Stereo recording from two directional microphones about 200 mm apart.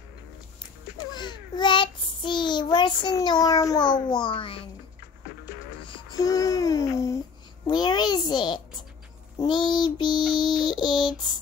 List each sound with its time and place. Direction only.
0.9 s child singing: 20° left (ahead or behind)
6.1 s a sound: 15° left (ahead or behind)
7.6 s child singing: 20° left (ahead or behind)